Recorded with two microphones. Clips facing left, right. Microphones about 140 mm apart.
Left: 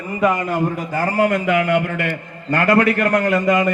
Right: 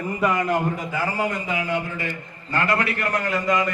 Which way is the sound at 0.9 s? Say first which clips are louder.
Left 9 dB; 50° left (ahead or behind).